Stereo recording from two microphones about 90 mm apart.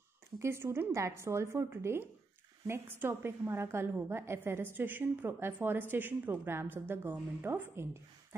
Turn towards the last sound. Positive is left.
turn(degrees=-25)  # may be behind; listen again after turning